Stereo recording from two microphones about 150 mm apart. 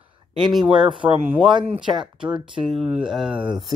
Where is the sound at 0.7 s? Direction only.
35° right (ahead or behind).